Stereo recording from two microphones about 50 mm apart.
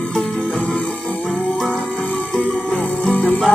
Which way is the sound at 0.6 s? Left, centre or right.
Left.